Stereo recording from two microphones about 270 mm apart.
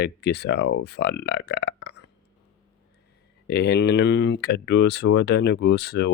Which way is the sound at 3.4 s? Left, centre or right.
Left.